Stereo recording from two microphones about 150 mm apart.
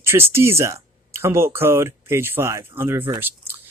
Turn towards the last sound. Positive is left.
turn(degrees=-15)  # may be behind; listen again after turning